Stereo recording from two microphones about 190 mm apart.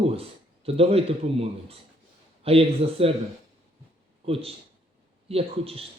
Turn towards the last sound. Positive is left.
turn(degrees=-30)  # may be behind; listen again after turning